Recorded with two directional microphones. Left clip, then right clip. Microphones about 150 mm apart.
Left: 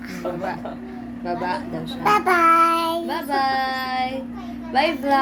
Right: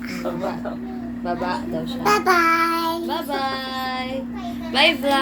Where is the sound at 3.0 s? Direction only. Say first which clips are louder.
Left 2 dB; 45° left (ahead or behind).